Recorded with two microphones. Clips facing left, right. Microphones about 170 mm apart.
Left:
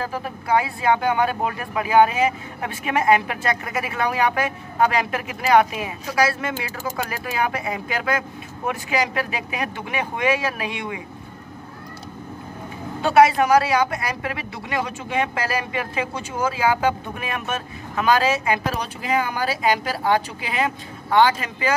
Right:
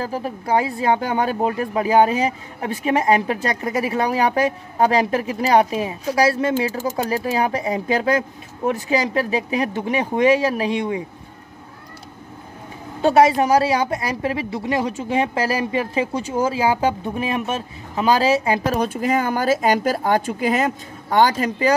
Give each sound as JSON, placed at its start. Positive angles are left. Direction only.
{"t": 0.0, "sound": "speech", "side_deg": -35}
{"t": 13.0, "sound": "speech", "side_deg": -35}
{"t": 18.8, "sound": "speech", "side_deg": -45}